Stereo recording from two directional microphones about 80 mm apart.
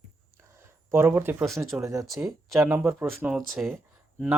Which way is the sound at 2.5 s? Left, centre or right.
Right.